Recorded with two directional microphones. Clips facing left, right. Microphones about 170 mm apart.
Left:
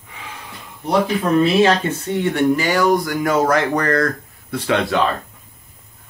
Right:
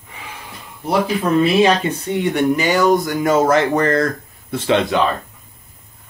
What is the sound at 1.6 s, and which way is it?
Speech, 15° right (ahead or behind).